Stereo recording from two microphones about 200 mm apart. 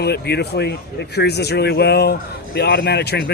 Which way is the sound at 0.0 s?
55° left (ahead or behind).